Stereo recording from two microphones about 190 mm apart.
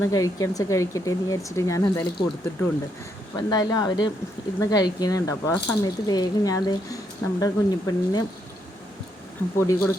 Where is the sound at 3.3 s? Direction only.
20° left (ahead or behind).